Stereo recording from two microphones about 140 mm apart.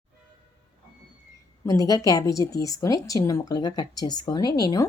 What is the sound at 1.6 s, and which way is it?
A woman's voice, 25° left (ahead or behind).